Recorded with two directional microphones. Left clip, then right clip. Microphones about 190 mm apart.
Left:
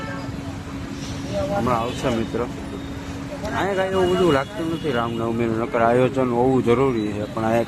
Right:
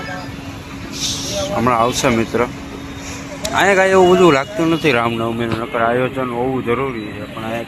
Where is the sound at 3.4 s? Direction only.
25° right (ahead or behind).